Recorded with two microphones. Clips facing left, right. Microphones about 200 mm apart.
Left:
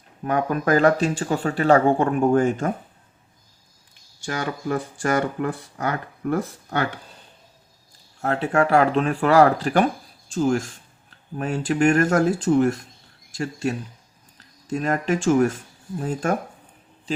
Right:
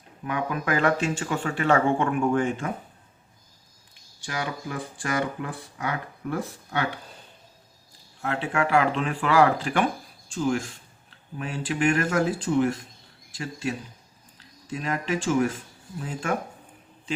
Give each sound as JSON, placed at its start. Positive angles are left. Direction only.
{"t": 0.3, "sound": "speech", "side_deg": 45}
{"t": 4.3, "sound": "speech", "side_deg": 45}
{"t": 8.2, "sound": "speech", "side_deg": 40}